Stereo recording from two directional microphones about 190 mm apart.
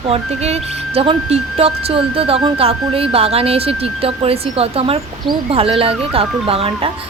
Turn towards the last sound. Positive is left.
turn(degrees=-30)  # may be behind; listen again after turning